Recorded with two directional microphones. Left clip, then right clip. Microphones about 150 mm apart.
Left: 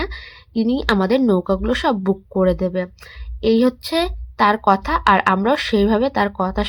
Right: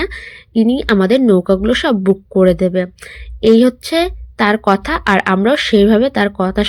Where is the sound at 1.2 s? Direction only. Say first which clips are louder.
Right 6 dB; 15° right (ahead or behind).